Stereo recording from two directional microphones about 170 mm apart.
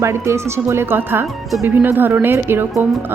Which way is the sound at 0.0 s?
15° right (ahead or behind).